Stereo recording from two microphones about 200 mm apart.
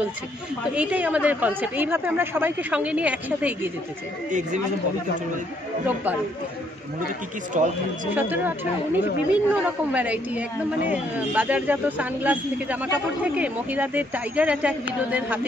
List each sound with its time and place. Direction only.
0.7 s a woman's voice: 5° right (ahead or behind)
4.3 s speech: 40° right (ahead or behind)
7.5 s speech: 40° right (ahead or behind)
8.1 s a woman's voice: 10° right (ahead or behind)